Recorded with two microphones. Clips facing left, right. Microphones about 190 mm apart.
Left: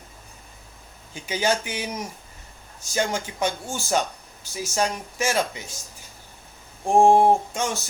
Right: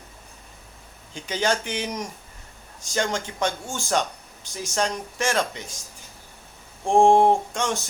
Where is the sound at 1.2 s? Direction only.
10° left (ahead or behind).